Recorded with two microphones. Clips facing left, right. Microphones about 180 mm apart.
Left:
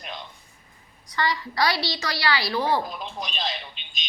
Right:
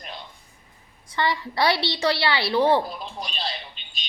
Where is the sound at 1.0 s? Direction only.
25° right (ahead or behind).